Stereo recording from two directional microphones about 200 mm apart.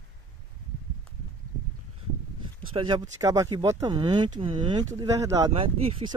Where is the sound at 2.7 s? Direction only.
25° right (ahead or behind).